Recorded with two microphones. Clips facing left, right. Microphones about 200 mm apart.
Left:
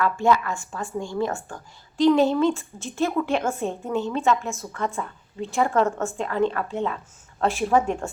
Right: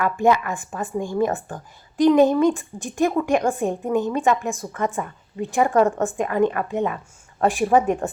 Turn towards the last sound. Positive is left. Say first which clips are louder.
# right 3 dB
turn(degrees=-15)  # may be behind; listen again after turning